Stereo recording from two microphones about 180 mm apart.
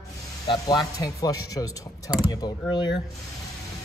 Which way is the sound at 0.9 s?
20° left (ahead or behind).